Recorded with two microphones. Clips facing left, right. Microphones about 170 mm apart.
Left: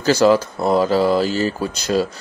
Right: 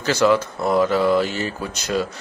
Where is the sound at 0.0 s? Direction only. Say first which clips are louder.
Left 3 dB; 35° left (ahead or behind).